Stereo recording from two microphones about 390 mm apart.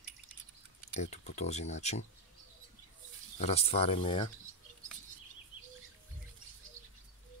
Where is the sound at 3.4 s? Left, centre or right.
Centre.